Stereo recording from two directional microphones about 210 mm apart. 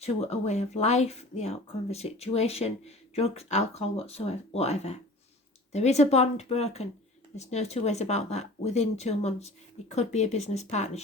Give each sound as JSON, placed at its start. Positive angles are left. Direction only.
{"t": 0.0, "sound": "speech", "side_deg": 30}